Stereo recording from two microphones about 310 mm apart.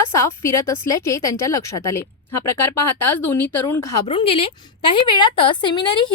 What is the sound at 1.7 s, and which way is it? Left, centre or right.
Speech, left.